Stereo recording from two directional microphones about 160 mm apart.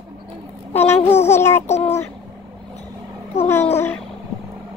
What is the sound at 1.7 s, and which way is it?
Speech, 40° left (ahead or behind).